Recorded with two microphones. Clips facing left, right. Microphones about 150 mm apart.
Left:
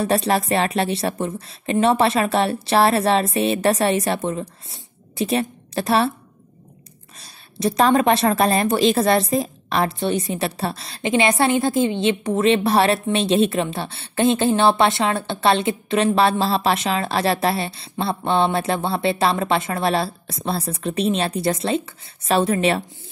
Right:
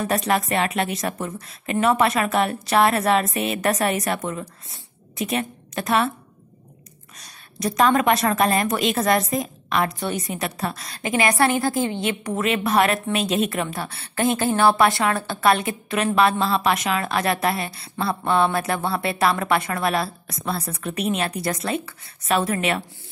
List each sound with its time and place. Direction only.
0.0 s speech: 30° left (ahead or behind)
7.2 s speech: 30° left (ahead or behind)